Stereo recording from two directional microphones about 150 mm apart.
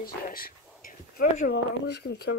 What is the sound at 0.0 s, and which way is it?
Speech, 75° left (ahead or behind).